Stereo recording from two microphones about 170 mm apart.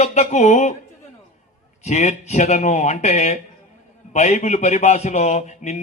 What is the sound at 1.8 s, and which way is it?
A man's voice, 45° left (ahead or behind).